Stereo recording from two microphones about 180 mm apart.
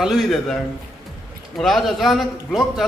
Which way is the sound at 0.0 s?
Centre (ahead or behind).